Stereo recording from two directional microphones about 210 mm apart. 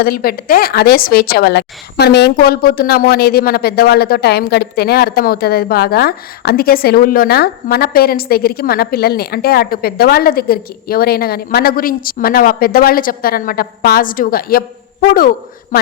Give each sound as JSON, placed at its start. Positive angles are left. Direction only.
{"t": 0.0, "sound": "a woman's voice", "side_deg": 45}